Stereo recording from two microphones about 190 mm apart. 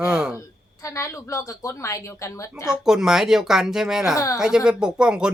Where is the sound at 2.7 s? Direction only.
5° right (ahead or behind).